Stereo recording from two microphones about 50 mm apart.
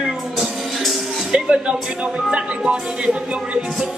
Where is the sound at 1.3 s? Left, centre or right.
Right.